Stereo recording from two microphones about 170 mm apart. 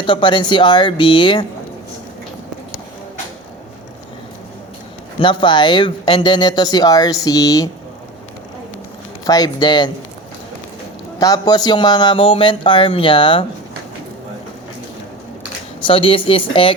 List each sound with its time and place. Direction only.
0.0 s speech: 30° left (ahead or behind)
5.2 s speech: 30° left (ahead or behind)
9.2 s speech: 20° left (ahead or behind)
11.2 s speech: 20° left (ahead or behind)
15.8 s speech: 30° left (ahead or behind)